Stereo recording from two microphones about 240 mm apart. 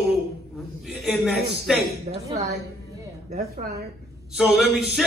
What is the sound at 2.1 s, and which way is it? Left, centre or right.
Speech, right.